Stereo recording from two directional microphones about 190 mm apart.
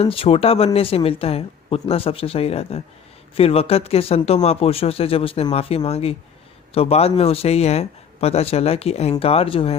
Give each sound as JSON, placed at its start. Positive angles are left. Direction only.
{"t": 0.0, "sound": "speech", "side_deg": 30}